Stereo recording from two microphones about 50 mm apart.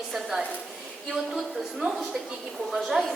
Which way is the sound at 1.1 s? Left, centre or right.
Centre.